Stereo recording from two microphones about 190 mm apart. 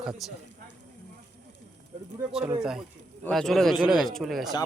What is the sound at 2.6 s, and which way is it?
Speech, 5° right (ahead or behind).